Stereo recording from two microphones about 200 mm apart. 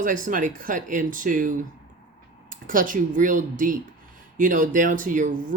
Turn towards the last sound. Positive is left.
turn(degrees=-40)  # may be behind; listen again after turning